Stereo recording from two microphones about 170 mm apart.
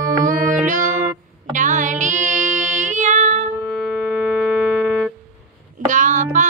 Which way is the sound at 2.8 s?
45° right (ahead or behind).